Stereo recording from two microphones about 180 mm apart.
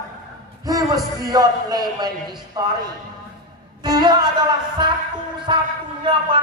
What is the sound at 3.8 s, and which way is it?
A man's voice, 20° right (ahead or behind).